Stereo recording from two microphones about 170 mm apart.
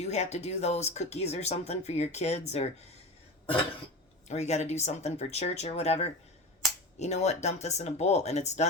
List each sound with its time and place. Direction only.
0.0 s speech: 40° left (ahead or behind)
4.3 s speech: 40° left (ahead or behind)